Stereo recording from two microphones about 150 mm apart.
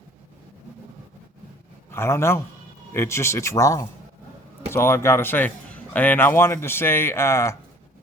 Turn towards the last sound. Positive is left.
turn(degrees=20)  # may be behind; listen again after turning